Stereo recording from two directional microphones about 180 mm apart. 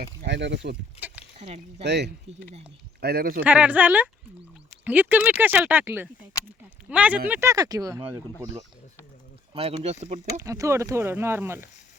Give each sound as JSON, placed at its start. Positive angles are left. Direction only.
{"t": 0.3, "sound": "speech", "side_deg": -75}
{"t": 0.9, "sound": "a sound", "side_deg": -10}
{"t": 1.4, "sound": "speech", "side_deg": -35}
{"t": 1.8, "sound": "speech", "side_deg": -70}
{"t": 3.0, "sound": "speech", "side_deg": -60}
{"t": 3.4, "sound": "speech", "side_deg": -10}
{"t": 9.6, "sound": "speech", "side_deg": -35}
{"t": 10.3, "sound": "speech", "side_deg": -15}